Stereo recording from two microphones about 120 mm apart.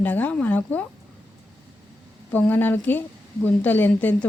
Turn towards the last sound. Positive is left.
turn(degrees=15)  # may be behind; listen again after turning